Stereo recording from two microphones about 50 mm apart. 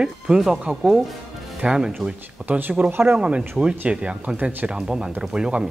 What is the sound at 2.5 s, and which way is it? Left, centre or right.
Speech, right.